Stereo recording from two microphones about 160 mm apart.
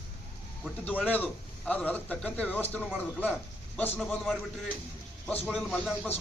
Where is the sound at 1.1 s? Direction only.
10° left (ahead or behind).